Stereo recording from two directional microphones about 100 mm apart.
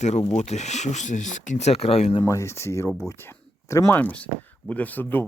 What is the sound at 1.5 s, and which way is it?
Speech, 90° left.